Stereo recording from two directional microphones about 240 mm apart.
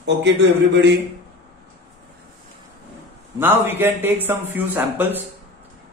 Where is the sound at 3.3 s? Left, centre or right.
Centre.